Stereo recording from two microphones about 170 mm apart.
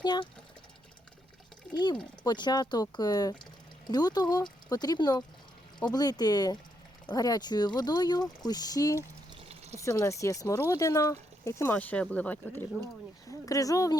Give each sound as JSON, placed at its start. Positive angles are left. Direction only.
{"t": 0.0, "sound": "speech", "side_deg": 25}
{"t": 1.7, "sound": "speech", "side_deg": 25}
{"t": 13.2, "sound": "speech", "side_deg": 20}